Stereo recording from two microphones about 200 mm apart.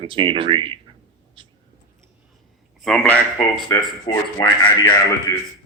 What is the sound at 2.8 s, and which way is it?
Speech, 5° left (ahead or behind).